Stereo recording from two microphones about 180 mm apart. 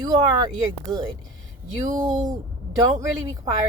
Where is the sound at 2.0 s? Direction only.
45° right (ahead or behind).